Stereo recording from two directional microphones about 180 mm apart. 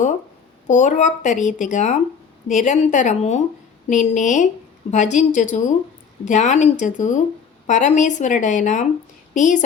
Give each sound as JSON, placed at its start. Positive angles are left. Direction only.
{"t": 0.7, "sound": "a woman's voice", "side_deg": 40}